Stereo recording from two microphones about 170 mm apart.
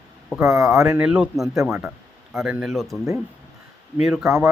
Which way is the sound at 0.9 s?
5° right (ahead or behind).